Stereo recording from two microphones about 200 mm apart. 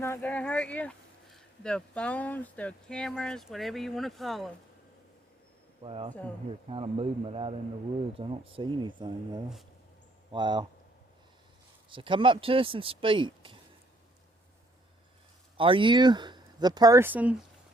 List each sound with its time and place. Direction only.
0.0 s speech: 10° left (ahead or behind)
5.8 s speech: 30° right (ahead or behind)
10.3 s speech: 20° right (ahead or behind)
11.9 s speech: 25° right (ahead or behind)
15.5 s speech: 25° right (ahead or behind); by 17.3 s 10° right (ahead or behind)